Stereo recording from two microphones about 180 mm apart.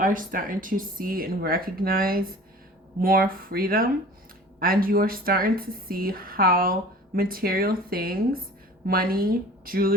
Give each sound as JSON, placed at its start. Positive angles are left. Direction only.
{"t": 0.0, "sound": "speech", "side_deg": -50}